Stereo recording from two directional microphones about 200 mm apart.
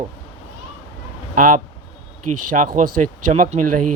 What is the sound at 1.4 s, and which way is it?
Speech, 45° right (ahead or behind).